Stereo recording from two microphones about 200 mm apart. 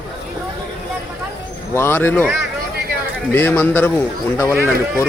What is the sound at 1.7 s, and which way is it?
Speech, 10° left (ahead or behind).